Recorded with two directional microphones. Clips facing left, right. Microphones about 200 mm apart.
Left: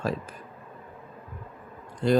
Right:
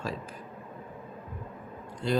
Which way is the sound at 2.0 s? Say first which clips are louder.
Left 6 dB; 55° left (ahead or behind).